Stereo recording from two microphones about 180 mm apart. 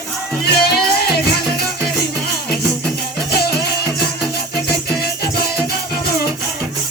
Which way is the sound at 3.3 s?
60° left (ahead or behind).